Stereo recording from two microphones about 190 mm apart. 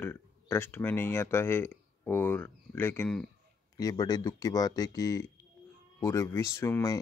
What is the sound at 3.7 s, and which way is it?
Speech, 20° left (ahead or behind).